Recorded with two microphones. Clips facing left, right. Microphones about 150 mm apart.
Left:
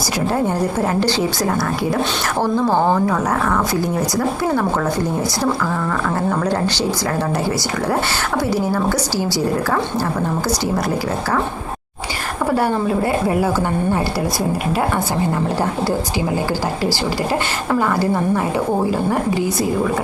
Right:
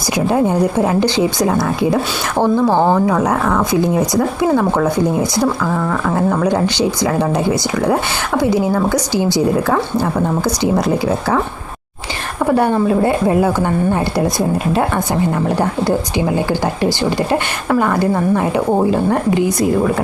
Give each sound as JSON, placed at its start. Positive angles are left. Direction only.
{"t": 0.3, "sound": "a woman's voice", "side_deg": -15}
{"t": 12.5, "sound": "a woman's voice", "side_deg": -20}
{"t": 15.4, "sound": "a woman's voice", "side_deg": -20}